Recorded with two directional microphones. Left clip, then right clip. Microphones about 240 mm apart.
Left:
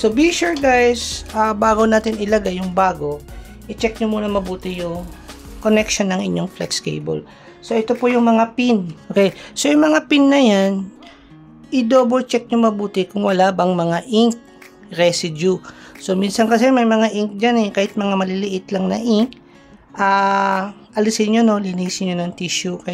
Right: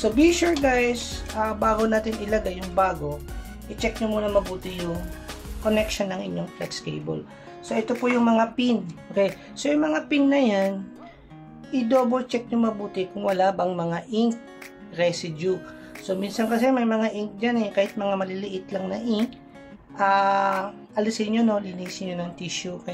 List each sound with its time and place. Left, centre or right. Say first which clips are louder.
0.0 s speech: left 4 dB; left
4.0 s speech: left 4 dB; left
5.6 s speech: left 7 dB; left